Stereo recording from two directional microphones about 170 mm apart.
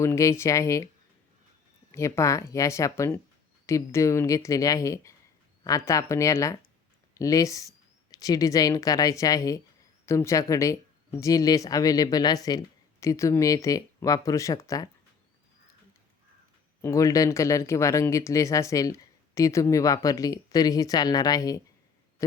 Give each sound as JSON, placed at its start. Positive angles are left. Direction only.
{"t": 0.0, "sound": "speech", "side_deg": 15}
{"t": 1.9, "sound": "speech", "side_deg": 15}
{"t": 16.8, "sound": "speech", "side_deg": 20}